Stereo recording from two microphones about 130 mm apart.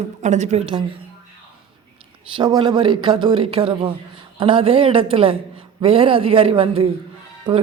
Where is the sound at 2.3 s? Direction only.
35° right (ahead or behind).